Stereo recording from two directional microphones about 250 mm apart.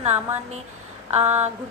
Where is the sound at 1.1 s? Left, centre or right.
Right.